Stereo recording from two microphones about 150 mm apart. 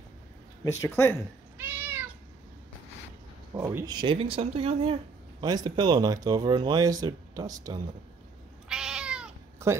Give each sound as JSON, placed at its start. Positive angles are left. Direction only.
{"t": 0.7, "sound": "speech", "side_deg": 20}
{"t": 1.6, "sound": "cat", "side_deg": -15}
{"t": 3.5, "sound": "speech", "side_deg": -20}
{"t": 5.4, "sound": "speech", "side_deg": -30}
{"t": 8.6, "sound": "cat", "side_deg": -5}
{"t": 9.6, "sound": "a sound", "side_deg": -20}